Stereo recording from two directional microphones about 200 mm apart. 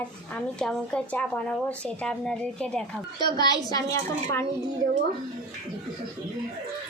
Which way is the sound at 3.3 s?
20° left (ahead or behind).